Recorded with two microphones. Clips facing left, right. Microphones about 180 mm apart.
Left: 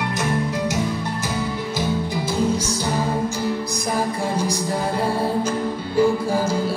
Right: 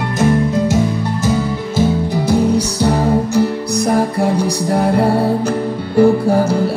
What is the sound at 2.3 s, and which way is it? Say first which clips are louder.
Music: right 8 dB; 65° right (ahead or behind).